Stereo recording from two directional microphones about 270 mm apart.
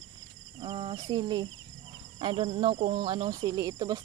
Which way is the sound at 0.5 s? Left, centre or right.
Centre.